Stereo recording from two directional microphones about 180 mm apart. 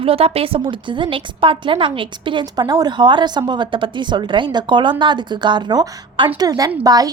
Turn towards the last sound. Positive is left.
turn(degrees=-20)  # may be behind; listen again after turning